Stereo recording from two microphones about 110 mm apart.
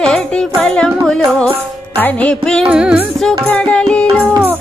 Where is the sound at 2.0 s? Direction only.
10° left (ahead or behind).